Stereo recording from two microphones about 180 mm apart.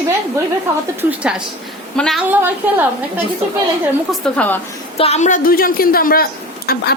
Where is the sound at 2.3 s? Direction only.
10° right (ahead or behind).